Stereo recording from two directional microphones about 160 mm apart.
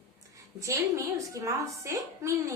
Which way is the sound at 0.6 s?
20° right (ahead or behind).